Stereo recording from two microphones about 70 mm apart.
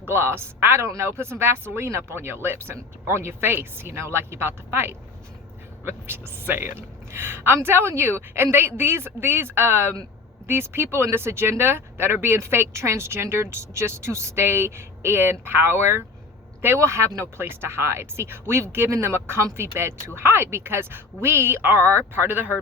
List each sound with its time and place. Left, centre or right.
0.1 s a woman's voice: right